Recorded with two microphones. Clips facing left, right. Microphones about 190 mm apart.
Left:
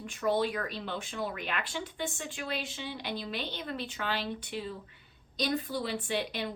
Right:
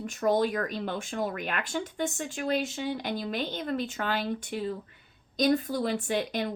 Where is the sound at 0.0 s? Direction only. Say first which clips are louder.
Right 4 dB; 45° right (ahead or behind).